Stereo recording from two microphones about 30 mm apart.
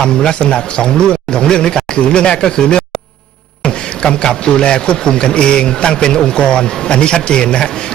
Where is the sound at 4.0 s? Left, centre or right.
Left.